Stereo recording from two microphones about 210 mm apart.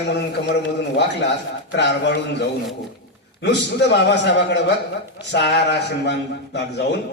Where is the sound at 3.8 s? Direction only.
55° left (ahead or behind).